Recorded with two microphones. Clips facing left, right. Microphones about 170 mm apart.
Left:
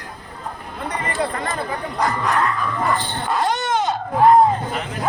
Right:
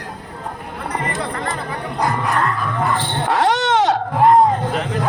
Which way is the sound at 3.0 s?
70° right (ahead or behind).